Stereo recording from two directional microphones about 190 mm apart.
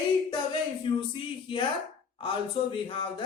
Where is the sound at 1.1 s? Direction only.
25° left (ahead or behind).